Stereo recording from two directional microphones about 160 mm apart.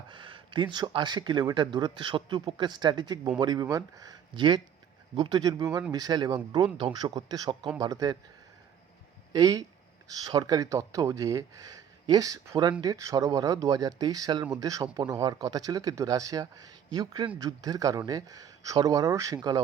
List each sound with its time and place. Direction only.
0.1 s speech: 30° right (ahead or behind)
5.4 s speech: 25° right (ahead or behind)
9.3 s speech: 25° right (ahead or behind)